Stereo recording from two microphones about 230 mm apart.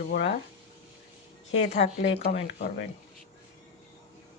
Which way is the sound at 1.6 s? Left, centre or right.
Left.